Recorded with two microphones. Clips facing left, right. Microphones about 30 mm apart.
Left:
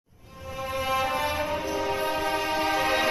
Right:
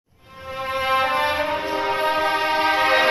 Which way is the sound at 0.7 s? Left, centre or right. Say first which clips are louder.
Right 6 dB; right.